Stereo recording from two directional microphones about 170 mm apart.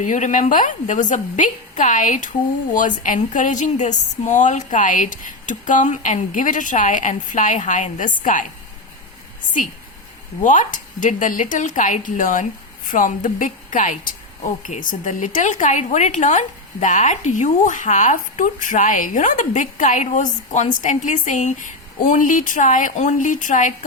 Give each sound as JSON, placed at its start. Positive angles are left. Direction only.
{"t": 0.0, "sound": "speech", "side_deg": 45}
{"t": 10.4, "sound": "speech", "side_deg": 45}